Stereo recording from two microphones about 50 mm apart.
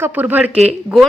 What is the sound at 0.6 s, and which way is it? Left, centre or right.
Speech, centre.